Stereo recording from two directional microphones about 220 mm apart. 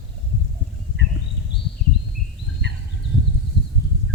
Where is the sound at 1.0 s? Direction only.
55° right (ahead or behind).